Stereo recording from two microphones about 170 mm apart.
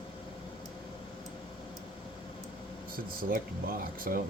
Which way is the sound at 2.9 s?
55° right (ahead or behind).